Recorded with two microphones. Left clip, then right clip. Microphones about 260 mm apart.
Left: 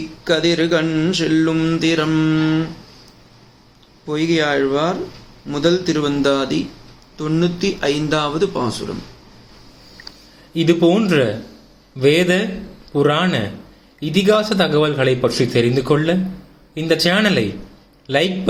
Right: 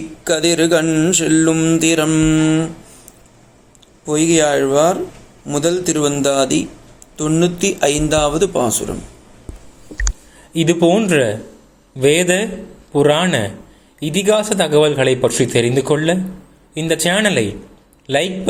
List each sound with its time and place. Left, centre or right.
0.3 s mantra: right
4.0 s mantra: right
10.5 s mantra: right
18.0 s a man's voice: right